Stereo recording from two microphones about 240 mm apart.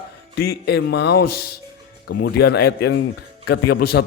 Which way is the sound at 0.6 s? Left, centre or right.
Left.